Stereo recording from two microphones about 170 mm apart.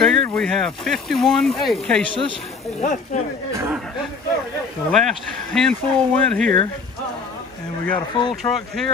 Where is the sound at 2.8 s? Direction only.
50° left (ahead or behind).